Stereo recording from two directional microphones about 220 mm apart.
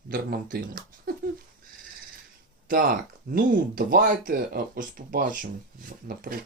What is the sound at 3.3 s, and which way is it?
Speech, 40° right (ahead or behind).